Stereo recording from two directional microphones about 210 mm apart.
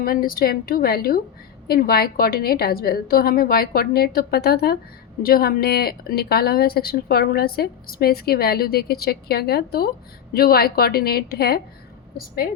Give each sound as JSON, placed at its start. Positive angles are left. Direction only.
{"t": 0.0, "sound": "speech", "side_deg": 45}